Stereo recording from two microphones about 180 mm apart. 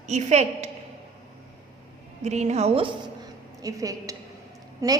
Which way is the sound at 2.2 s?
40° right (ahead or behind).